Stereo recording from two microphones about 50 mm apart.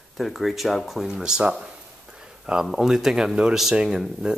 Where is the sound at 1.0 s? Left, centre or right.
Centre.